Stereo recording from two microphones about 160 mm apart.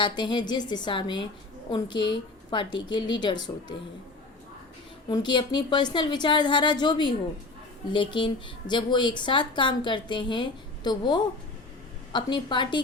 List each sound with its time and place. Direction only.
0.0 s a woman's voice: 30° left (ahead or behind)
5.0 s a woman's voice: 25° left (ahead or behind)